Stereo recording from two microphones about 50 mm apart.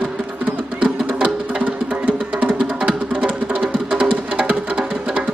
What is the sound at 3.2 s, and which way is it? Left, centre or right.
Music, centre.